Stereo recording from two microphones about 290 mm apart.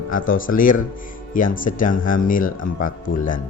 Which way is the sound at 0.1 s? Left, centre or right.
Left.